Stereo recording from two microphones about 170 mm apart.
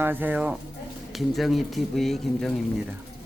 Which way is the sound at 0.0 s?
10° right (ahead or behind).